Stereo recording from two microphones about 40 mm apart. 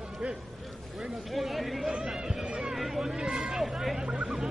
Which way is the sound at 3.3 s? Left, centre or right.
Centre.